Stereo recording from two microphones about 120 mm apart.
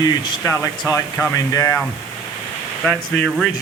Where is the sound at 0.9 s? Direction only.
20° left (ahead or behind).